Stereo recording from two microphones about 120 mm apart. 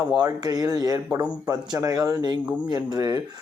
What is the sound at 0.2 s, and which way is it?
A man's voice, 35° right (ahead or behind).